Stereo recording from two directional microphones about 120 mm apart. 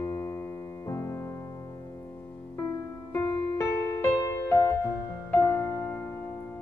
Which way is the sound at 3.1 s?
25° left (ahead or behind).